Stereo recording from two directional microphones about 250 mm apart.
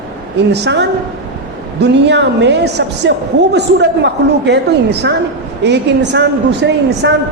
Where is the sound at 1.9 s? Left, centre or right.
Right.